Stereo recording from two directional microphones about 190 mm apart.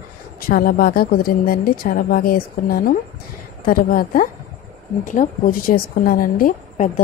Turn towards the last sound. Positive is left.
turn(degrees=45)  # may be behind; listen again after turning